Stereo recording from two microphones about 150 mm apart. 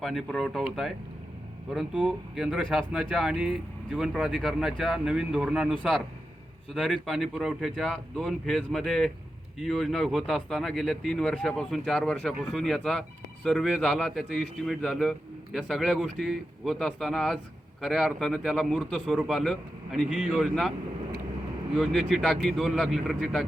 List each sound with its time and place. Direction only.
0.0 s speech: centre (ahead or behind)
21.8 s speech: centre (ahead or behind)